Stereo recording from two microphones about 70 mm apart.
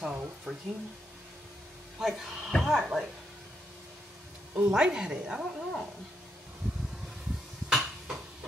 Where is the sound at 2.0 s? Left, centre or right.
Centre.